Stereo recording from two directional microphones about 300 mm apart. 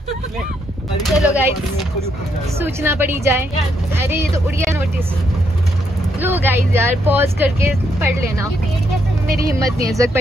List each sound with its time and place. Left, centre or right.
1.0 s speech: centre
2.6 s speech: centre
6.2 s speech: centre
9.3 s speech: right